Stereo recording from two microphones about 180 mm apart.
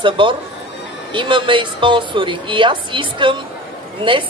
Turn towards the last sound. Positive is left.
turn(degrees=-30)  # may be behind; listen again after turning